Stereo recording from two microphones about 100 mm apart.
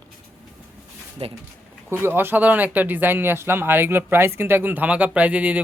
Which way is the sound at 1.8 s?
25° right (ahead or behind).